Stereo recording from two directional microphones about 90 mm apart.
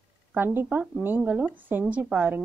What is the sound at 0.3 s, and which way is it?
A woman's voice, 20° right (ahead or behind).